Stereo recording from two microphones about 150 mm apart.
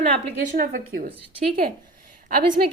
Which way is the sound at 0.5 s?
75° right (ahead or behind).